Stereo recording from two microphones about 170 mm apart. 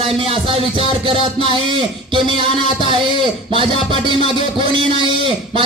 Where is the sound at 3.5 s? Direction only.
30° right (ahead or behind).